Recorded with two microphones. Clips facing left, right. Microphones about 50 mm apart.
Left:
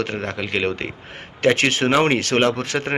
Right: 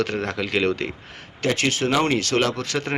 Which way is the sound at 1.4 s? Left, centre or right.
Left.